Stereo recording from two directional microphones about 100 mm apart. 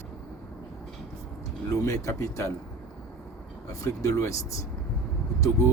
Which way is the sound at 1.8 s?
30° left (ahead or behind).